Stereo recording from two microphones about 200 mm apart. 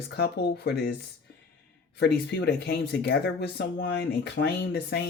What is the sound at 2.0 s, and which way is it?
Speech, 60° left (ahead or behind).